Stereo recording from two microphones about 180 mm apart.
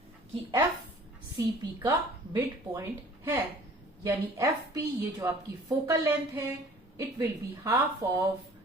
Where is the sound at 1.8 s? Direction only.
15° right (ahead or behind).